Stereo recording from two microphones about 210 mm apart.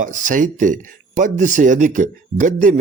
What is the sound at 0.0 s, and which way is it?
Speech, 35° right (ahead or behind).